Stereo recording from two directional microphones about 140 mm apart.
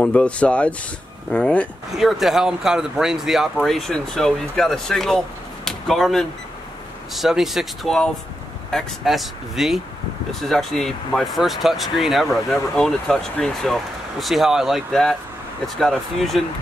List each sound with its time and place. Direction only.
0.0 s speech: 10° left (ahead or behind)
2.0 s speech: centre (ahead or behind)